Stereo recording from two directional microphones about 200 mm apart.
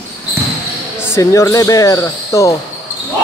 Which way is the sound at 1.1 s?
15° left (ahead or behind).